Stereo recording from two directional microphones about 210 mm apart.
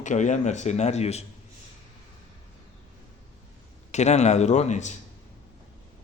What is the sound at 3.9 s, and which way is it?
A man's voice, 35° left (ahead or behind).